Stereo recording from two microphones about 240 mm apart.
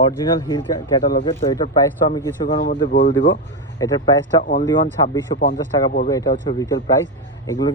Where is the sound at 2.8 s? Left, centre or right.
Left.